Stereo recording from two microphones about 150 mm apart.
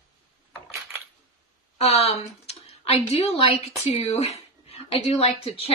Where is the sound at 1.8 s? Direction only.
45° left (ahead or behind).